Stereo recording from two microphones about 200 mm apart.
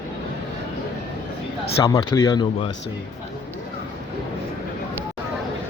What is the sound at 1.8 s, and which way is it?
Speech, 20° left (ahead or behind).